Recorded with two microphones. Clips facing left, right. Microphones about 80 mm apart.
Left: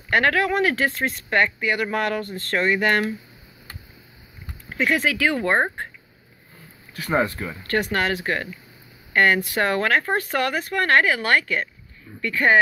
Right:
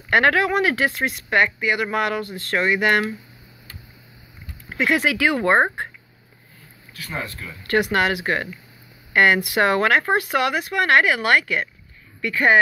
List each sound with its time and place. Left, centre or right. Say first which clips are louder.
0.1 s speech: right 2 dB; right
4.7 s speech: right 1 dB; centre
7.2 s speech: left 5 dB; centre
7.6 s speech: right 4 dB; centre